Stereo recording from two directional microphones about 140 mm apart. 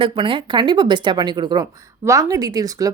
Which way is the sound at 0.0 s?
35° right (ahead or behind).